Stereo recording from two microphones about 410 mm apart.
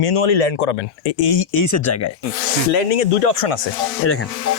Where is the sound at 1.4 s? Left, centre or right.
Left.